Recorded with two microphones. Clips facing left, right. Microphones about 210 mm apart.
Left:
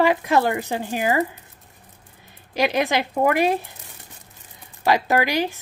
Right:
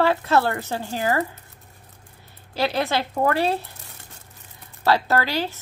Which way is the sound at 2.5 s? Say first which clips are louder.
Left 2 dB; 15° left (ahead or behind).